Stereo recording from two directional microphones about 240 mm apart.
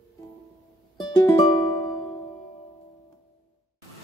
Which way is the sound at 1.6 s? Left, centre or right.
Centre.